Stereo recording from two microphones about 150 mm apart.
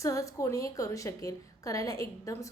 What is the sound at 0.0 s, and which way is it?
A woman's voice, 20° left (ahead or behind).